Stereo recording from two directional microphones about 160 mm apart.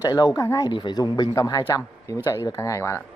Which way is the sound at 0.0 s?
25° left (ahead or behind).